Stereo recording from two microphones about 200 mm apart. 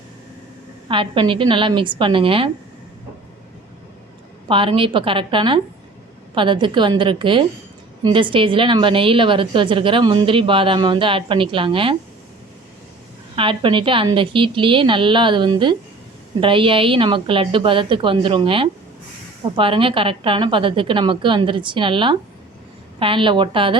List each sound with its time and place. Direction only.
0.9 s a woman's voice: 25° right (ahead or behind)
4.4 s a woman's voice: 25° right (ahead or behind)
13.3 s a woman's voice: 25° right (ahead or behind)